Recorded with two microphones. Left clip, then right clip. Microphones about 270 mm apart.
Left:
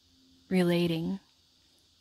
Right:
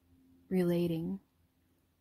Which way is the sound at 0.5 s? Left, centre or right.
Left.